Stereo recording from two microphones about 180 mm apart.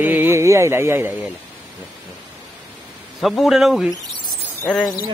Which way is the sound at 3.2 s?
Centre (ahead or behind).